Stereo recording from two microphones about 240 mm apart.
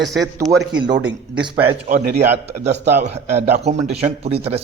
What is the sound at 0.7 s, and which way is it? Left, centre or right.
Speech, centre.